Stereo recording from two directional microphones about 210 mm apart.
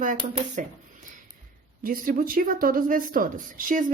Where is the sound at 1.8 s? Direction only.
40° right (ahead or behind).